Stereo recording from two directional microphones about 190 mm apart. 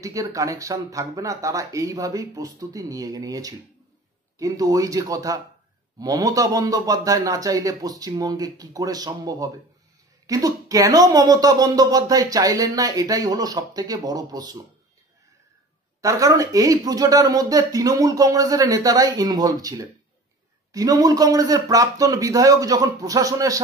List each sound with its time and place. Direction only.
0.0 s speech: 15° right (ahead or behind)
16.0 s speech: 15° right (ahead or behind)